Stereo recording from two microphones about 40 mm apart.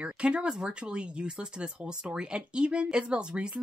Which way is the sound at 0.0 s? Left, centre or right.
Right.